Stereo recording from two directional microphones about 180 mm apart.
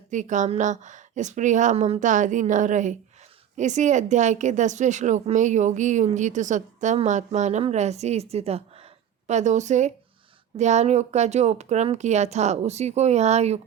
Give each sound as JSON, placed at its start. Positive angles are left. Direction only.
{"t": 0.1, "sound": "a woman's voice", "side_deg": -45}